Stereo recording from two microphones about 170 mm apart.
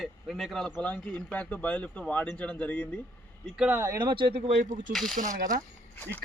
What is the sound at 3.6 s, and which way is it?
Speech, 10° right (ahead or behind).